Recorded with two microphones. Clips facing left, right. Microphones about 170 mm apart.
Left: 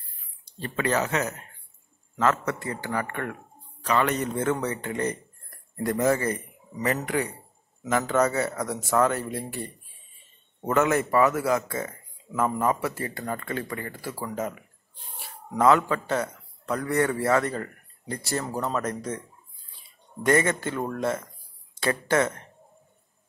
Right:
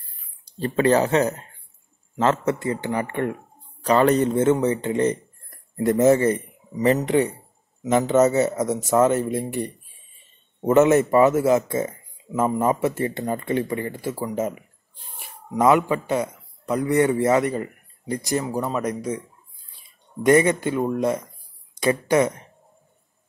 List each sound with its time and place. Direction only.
0.6 s a man's voice: 35° right (ahead or behind); by 19.2 s 10° right (ahead or behind)
20.2 s speech: 15° right (ahead or behind)